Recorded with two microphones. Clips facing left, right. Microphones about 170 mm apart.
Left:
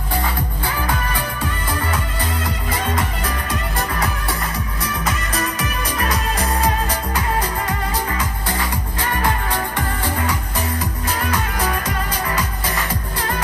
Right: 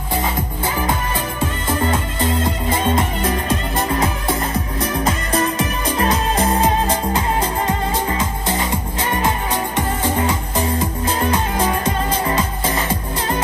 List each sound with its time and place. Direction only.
0.7 s music: 25° right (ahead or behind)